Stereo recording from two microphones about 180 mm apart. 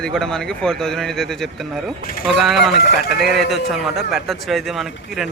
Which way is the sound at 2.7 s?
60° left (ahead or behind).